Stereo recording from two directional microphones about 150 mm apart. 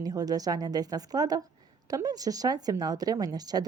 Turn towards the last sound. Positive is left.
turn(degrees=-25)  # may be behind; listen again after turning